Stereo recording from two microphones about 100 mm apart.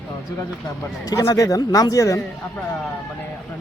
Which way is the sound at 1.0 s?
35° left (ahead or behind).